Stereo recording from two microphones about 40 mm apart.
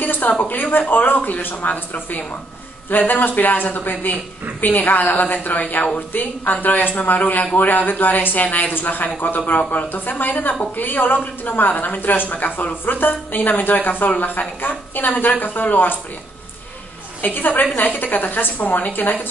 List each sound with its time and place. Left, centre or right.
0.0 s a woman's voice: left
17.2 s a woman's voice: left